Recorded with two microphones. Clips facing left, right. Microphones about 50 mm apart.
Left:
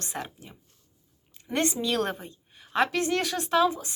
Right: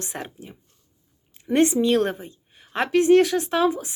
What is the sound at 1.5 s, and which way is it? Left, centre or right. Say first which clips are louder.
Speech: right 8 dB; right.